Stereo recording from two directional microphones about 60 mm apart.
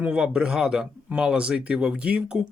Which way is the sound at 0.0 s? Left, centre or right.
Centre.